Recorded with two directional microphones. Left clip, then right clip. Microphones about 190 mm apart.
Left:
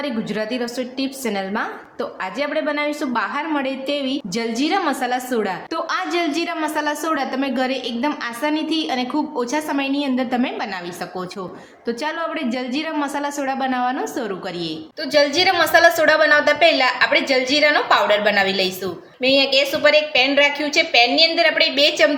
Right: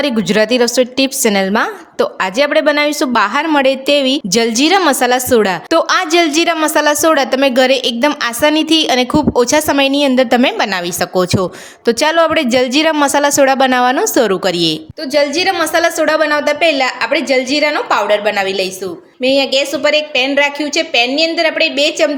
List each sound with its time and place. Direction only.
0.0 s a woman's voice: 60° right (ahead or behind); by 22.1 s 40° right (ahead or behind)